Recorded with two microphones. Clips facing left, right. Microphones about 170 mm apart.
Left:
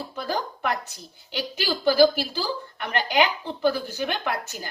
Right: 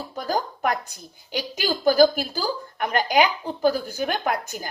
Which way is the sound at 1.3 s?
40° right (ahead or behind).